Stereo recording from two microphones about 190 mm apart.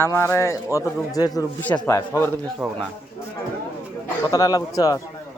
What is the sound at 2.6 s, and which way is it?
Speech, 5° right (ahead or behind).